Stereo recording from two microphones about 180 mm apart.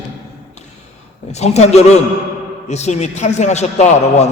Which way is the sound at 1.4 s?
35° left (ahead or behind).